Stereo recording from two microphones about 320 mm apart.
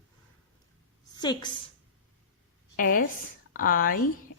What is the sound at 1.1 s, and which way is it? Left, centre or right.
Speech, centre.